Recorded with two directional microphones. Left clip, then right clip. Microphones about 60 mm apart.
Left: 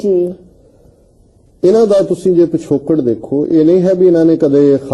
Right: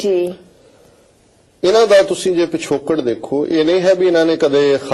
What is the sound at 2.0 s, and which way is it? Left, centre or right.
Speech, right.